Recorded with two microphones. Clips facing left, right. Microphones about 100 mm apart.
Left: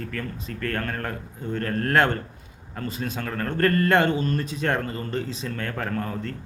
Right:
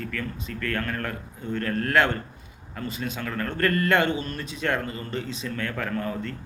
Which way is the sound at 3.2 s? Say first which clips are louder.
Left 3 dB; 25° left (ahead or behind).